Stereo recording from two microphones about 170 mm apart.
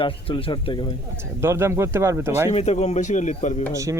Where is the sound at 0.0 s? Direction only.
30° left (ahead or behind).